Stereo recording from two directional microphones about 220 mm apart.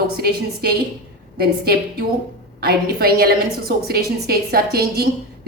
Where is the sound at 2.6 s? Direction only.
45° right (ahead or behind).